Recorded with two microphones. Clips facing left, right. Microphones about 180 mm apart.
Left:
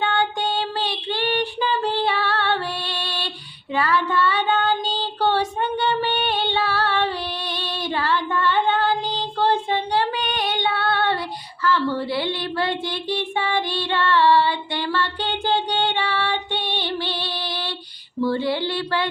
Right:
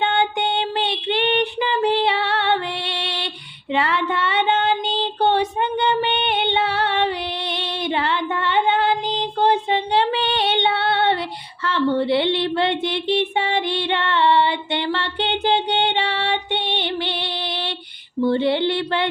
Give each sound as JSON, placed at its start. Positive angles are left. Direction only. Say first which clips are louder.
{"t": 0.0, "sound": "child singing", "louder": "right 2 dB", "side_deg": -20}
{"t": 11.6, "sound": "a sound", "louder": "right 2 dB", "side_deg": -25}
{"t": 18.2, "sound": "music", "louder": "right 4 dB", "side_deg": -25}